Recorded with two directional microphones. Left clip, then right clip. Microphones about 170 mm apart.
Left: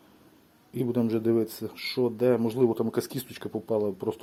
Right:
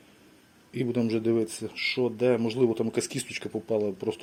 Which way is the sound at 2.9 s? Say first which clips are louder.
Right 1 dB; 55° left (ahead or behind).